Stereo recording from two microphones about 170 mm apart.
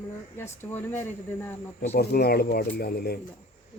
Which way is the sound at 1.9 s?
70° left (ahead or behind).